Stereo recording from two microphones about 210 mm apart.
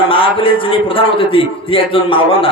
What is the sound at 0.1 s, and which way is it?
A man's voice, 25° left (ahead or behind).